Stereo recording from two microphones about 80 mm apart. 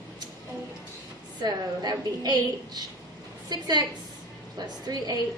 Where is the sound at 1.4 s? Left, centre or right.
Right.